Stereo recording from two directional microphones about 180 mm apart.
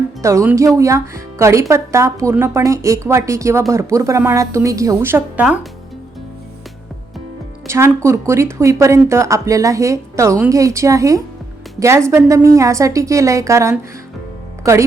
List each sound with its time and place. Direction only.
0.2 s speech: 15° right (ahead or behind)
7.7 s speech: 15° right (ahead or behind)